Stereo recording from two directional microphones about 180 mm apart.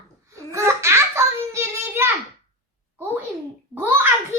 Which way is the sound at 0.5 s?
15° right (ahead or behind).